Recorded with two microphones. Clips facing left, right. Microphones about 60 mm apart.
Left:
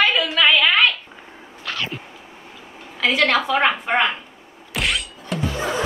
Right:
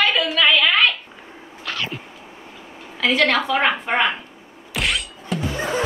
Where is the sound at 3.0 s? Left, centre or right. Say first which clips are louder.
Even; centre.